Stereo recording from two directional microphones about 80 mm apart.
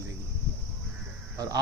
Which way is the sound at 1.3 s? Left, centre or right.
Right.